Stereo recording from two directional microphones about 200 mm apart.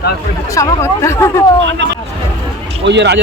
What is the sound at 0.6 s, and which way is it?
Speech, 15° left (ahead or behind).